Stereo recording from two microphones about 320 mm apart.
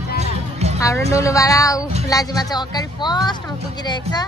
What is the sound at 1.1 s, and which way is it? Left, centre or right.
Speech, centre.